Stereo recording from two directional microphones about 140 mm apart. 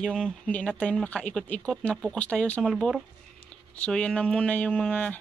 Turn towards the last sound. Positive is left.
turn(degrees=10)  # may be behind; listen again after turning